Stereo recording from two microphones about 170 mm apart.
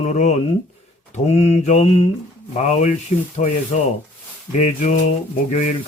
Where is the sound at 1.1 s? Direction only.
40° left (ahead or behind).